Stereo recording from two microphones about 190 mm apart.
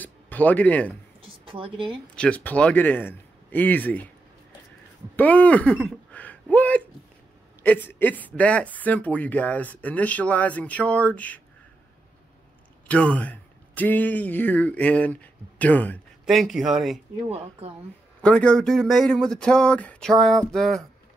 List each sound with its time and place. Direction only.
0.0 s a sound: 10° left (ahead or behind)
1.4 s a woman's voice: 25° right (ahead or behind)
2.1 s speech: 5° left (ahead or behind)
5.1 s speech: 10° left (ahead or behind)
5.9 s a sound: 5° left (ahead or behind)
6.5 s speech: 10° left (ahead or behind)
12.8 s speech: 5° left (ahead or behind)
17.3 s speech: 30° right (ahead or behind)
18.2 s speech: 5° left (ahead or behind)